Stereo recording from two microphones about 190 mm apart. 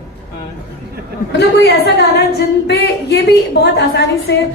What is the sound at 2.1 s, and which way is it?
A woman's voice, 60° left (ahead or behind).